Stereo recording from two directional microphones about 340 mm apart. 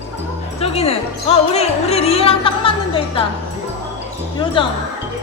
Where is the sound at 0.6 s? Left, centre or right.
Centre.